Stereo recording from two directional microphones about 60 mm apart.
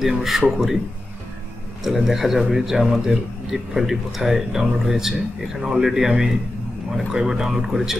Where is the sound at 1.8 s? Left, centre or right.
Centre.